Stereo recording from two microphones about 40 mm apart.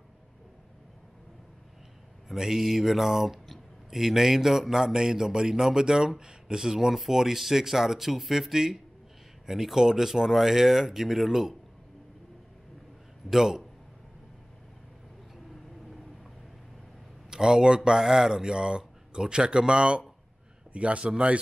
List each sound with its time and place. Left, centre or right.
2.3 s a man's voice: centre
13.3 s a man's voice: centre
15.5 s vehicle: centre
17.3 s a man's voice: centre; by 21.0 s right
21.0 s speech: centre